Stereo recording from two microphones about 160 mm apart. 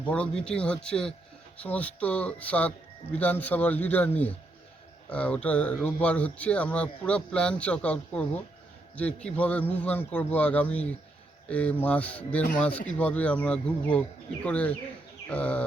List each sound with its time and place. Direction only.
0.0 s speech: 5° left (ahead or behind)